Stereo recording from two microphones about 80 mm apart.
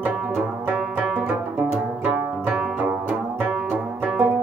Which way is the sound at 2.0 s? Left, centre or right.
Right.